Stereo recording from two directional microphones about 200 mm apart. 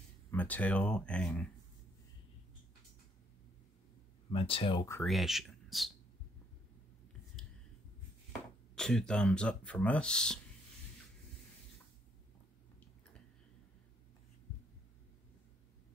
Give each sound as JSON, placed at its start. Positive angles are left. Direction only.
{"t": 0.3, "sound": "speech", "side_deg": 10}
{"t": 4.3, "sound": "speech", "side_deg": 25}
{"t": 5.0, "sound": "speech", "side_deg": 0}
{"t": 8.7, "sound": "speech", "side_deg": 5}